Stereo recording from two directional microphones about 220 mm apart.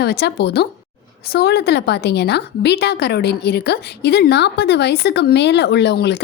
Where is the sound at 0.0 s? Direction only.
50° left (ahead or behind).